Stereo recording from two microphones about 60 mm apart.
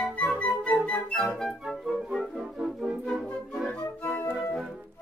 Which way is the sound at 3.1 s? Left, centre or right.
Centre.